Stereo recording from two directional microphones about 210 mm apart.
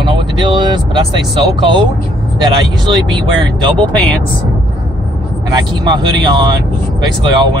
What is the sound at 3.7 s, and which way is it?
Speech, 5° left (ahead or behind).